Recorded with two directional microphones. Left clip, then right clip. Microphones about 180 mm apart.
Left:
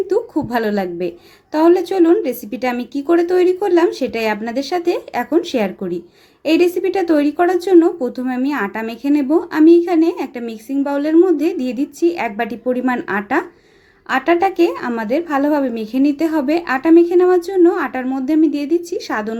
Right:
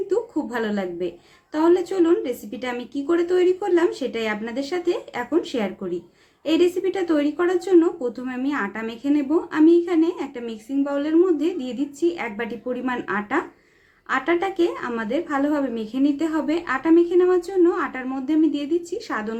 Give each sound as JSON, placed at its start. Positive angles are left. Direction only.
{"t": 0.1, "sound": "a woman's voice", "side_deg": 40}